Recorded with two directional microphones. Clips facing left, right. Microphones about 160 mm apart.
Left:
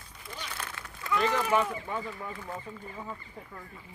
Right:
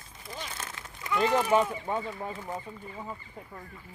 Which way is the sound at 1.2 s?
35° right (ahead or behind).